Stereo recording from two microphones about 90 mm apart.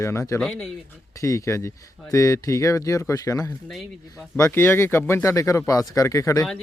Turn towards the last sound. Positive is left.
turn(degrees=35)  # may be behind; listen again after turning